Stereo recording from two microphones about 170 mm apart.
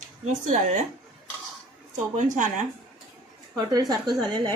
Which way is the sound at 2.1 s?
45° right (ahead or behind).